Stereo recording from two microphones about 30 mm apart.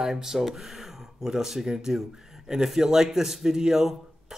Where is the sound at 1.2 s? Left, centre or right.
Centre.